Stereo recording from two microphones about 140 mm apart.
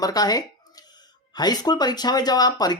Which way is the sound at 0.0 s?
25° left (ahead or behind).